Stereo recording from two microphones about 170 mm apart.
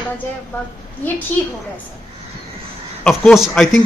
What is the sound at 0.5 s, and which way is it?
Speech, 10° left (ahead or behind).